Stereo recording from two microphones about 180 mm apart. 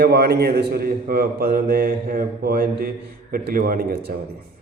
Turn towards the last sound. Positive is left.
turn(degrees=-55)  # may be behind; listen again after turning